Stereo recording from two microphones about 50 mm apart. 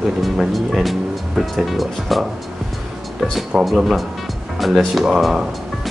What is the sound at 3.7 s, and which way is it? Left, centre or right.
Speech, centre.